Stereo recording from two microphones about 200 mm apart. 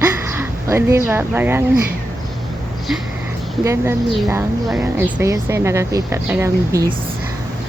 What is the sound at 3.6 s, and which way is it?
Speech, 15° right (ahead or behind).